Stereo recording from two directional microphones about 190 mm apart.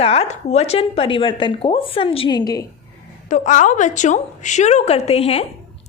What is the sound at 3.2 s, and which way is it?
A woman's voice, 40° left (ahead or behind).